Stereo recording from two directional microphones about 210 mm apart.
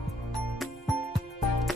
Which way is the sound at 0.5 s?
Centre (ahead or behind).